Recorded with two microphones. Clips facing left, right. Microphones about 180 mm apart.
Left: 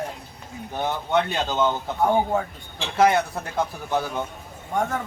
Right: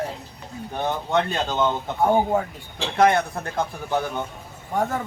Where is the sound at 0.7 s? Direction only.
5° left (ahead or behind).